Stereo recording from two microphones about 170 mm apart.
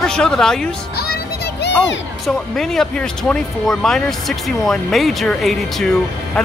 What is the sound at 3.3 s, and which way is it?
Speech, 5° left (ahead or behind).